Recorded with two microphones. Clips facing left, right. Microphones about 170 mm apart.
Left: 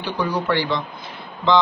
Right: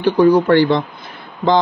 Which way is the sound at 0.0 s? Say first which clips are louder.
Right 12 dB; 50° right (ahead or behind).